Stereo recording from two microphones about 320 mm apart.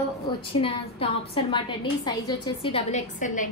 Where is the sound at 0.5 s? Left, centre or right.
Centre.